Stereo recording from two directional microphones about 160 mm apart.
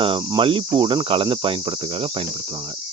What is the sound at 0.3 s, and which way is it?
Cricket, 30° right (ahead or behind).